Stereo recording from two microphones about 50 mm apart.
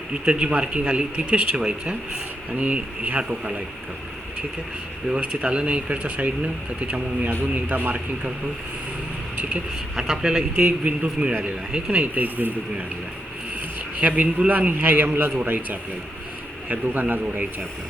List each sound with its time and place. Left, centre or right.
0.1 s speech: right
5.3 s speech: right
7.5 s a man's voice: right
9.9 s speech: centre
10.6 s speech: right
12.1 s a man's voice: right
14.0 s a man's voice: right